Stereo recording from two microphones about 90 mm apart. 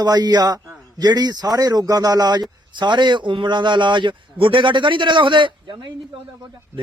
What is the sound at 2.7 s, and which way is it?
A man's voice, 60° right (ahead or behind).